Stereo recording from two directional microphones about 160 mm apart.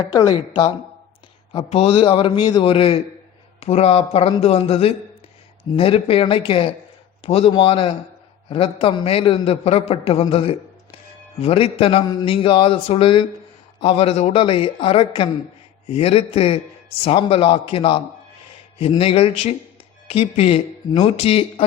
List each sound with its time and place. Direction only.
0.0 s a woman's voice: 25° left (ahead or behind)